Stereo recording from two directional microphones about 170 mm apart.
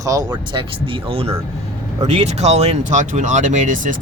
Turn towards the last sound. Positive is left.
turn(degrees=-50)  # may be behind; listen again after turning